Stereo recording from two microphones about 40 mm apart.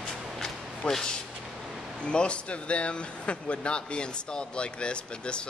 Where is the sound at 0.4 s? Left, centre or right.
Centre.